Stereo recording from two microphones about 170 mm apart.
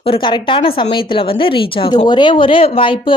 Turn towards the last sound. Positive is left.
turn(degrees=30)  # may be behind; listen again after turning